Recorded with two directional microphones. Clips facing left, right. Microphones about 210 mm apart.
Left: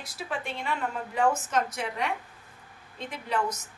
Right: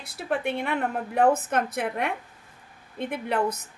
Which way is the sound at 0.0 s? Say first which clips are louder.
Right 7 dB; 60° right (ahead or behind).